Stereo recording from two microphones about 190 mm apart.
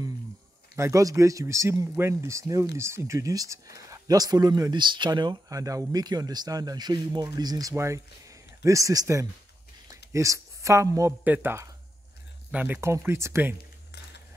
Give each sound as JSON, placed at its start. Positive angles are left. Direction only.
{"t": 0.7, "sound": "speech", "side_deg": -15}